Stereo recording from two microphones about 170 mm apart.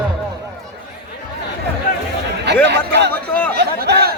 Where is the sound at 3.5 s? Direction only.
65° right (ahead or behind).